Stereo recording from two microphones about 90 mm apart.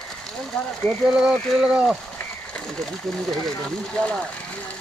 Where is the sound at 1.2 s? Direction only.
5° right (ahead or behind).